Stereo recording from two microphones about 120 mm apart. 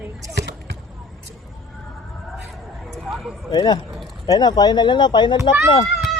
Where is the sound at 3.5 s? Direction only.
35° left (ahead or behind).